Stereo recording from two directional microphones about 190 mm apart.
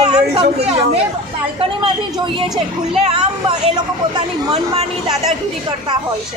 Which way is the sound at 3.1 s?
30° right (ahead or behind).